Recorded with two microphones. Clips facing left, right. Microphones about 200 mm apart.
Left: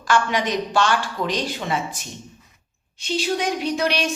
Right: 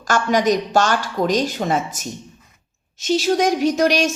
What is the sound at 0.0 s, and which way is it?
Speech, 45° right (ahead or behind).